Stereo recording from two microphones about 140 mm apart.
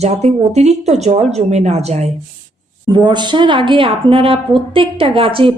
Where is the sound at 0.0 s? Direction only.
50° right (ahead or behind).